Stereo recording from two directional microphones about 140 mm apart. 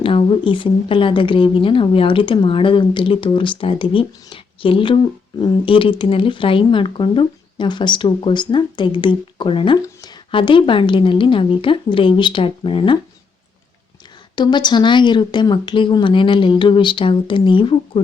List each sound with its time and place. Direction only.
0.0 s a woman's voice: 40° left (ahead or behind)
14.3 s a woman's voice: 30° left (ahead or behind)